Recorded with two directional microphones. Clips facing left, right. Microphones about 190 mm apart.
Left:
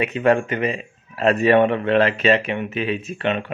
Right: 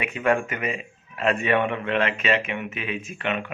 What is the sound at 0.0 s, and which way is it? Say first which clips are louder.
A man's voice: left 5 dB; 35° left (ahead or behind).